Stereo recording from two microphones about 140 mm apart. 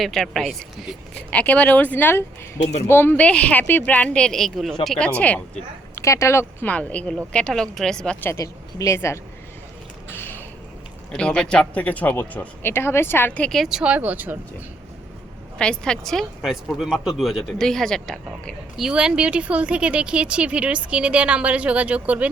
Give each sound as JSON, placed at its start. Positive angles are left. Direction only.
{"t": 0.0, "sound": "speech", "side_deg": 0}
{"t": 6.0, "sound": "a woman's voice", "side_deg": 20}
{"t": 8.3, "sound": "speech", "side_deg": 20}
{"t": 10.1, "sound": "a sound", "side_deg": 15}
{"t": 11.1, "sound": "speech", "side_deg": 5}
{"t": 15.5, "sound": "speech", "side_deg": 5}